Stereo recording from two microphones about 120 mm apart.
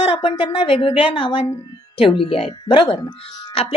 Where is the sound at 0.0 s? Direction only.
50° left (ahead or behind).